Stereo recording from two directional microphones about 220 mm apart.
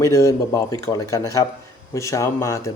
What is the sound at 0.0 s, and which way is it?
Speech, 15° left (ahead or behind).